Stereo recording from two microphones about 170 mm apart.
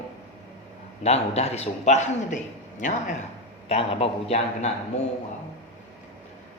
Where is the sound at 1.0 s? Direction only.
40° left (ahead or behind).